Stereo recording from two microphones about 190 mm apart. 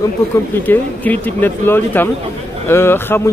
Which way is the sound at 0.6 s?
10° left (ahead or behind).